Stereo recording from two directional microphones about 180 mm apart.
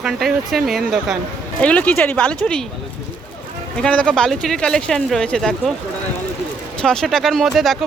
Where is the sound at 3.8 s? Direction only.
5° left (ahead or behind).